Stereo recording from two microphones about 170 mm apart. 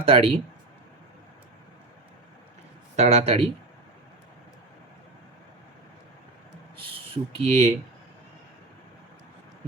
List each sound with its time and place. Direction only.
0.0 s speech: 35° right (ahead or behind)
2.9 s speech: 40° right (ahead or behind)
6.9 s speech: 30° right (ahead or behind)